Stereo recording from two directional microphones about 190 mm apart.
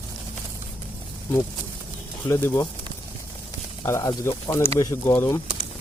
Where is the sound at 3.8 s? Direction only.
15° left (ahead or behind).